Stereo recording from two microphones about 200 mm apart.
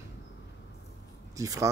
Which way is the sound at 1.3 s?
15° right (ahead or behind).